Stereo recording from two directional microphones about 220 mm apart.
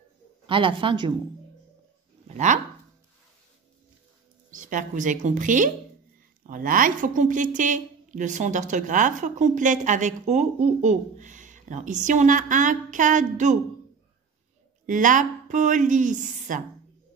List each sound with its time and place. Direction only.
0.5 s speech: 25° right (ahead or behind)
2.2 s speech: 35° right (ahead or behind)
4.6 s a woman's voice: 35° right (ahead or behind)
14.9 s a woman's voice: 35° right (ahead or behind)